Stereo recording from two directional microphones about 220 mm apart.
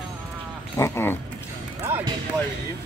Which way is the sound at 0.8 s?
10° left (ahead or behind).